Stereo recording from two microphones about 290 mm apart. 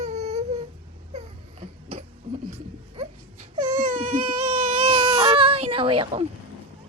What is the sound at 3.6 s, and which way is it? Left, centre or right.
Baby cry, centre.